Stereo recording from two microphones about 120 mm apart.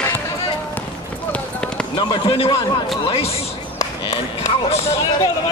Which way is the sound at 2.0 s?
45° left (ahead or behind).